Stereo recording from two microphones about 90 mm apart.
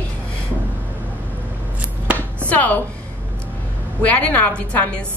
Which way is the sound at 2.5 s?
15° left (ahead or behind).